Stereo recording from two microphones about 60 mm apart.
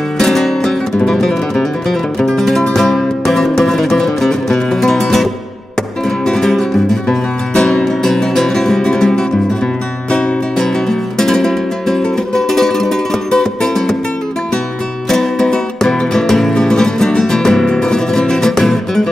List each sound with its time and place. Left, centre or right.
0.2 s music: centre
15.0 s music: centre